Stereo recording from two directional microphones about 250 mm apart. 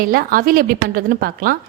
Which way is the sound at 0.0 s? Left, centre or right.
Right.